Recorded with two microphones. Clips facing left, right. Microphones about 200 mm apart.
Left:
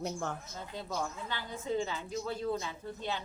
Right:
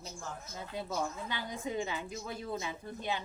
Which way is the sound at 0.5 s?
10° right (ahead or behind).